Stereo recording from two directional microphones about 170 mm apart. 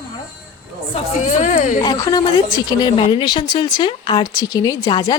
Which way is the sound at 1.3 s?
45° left (ahead or behind).